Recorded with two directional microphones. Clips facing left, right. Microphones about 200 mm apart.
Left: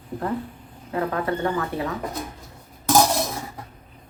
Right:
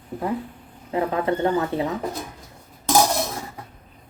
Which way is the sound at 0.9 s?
20° right (ahead or behind).